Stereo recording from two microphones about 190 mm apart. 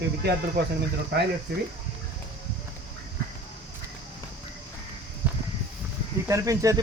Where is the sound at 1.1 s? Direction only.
60° right (ahead or behind).